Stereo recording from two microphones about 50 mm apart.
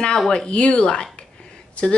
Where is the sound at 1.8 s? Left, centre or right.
Left.